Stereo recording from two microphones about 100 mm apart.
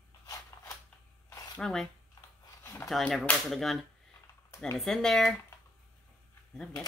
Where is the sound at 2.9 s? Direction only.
Centre (ahead or behind).